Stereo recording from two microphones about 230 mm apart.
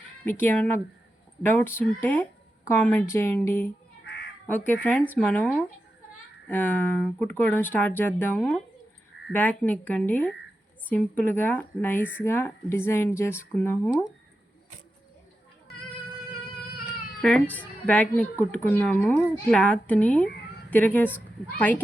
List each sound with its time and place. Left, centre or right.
0.3 s speech: centre
4.0 s crow: left
4.4 s a woman's voice: centre
17.2 s a woman's voice: centre